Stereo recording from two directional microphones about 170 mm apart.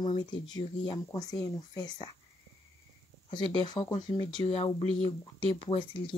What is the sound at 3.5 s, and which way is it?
Speech, 25° left (ahead or behind).